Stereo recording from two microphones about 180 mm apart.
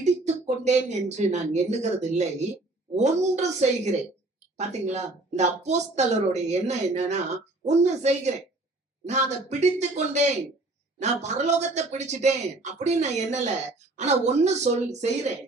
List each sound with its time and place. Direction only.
0.0 s speech: 40° right (ahead or behind)